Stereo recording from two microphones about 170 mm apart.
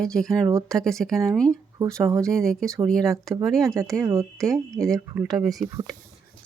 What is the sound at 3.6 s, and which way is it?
Speech, 20° right (ahead or behind).